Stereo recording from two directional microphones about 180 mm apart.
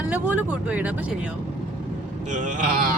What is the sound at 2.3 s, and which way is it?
Speech, 45° right (ahead or behind).